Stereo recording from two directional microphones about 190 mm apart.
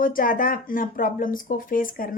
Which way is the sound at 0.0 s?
45° left (ahead or behind).